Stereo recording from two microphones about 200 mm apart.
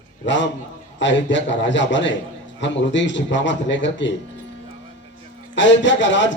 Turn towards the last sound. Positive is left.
turn(degrees=65)  # may be behind; listen again after turning